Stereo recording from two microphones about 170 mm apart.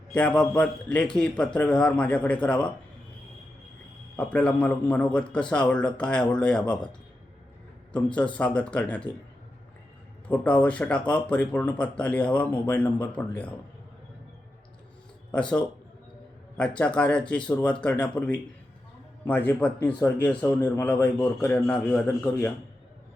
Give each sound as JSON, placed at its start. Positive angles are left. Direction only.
{"t": 0.1, "sound": "a man's voice", "side_deg": 5}
{"t": 4.2, "sound": "a man's voice", "side_deg": 5}
{"t": 7.9, "sound": "a man's voice", "side_deg": 5}
{"t": 10.2, "sound": "a man's voice", "side_deg": 10}
{"t": 15.4, "sound": "a man's voice", "side_deg": 5}